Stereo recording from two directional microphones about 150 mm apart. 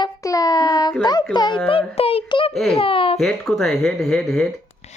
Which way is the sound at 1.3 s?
30° left (ahead or behind).